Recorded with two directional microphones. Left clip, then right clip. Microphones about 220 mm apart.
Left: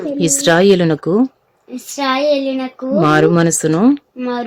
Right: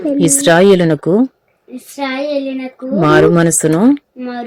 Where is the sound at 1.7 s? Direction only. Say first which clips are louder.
Left 3 dB; 30° left (ahead or behind).